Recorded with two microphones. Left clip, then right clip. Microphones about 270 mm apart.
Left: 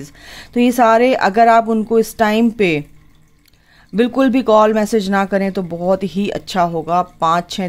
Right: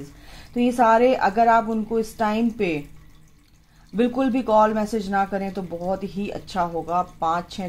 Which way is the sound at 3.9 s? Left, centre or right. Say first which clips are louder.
Left 7 dB; left.